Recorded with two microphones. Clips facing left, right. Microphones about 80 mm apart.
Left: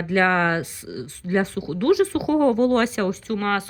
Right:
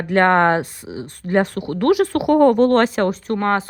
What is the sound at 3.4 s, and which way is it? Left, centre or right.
Speech, right.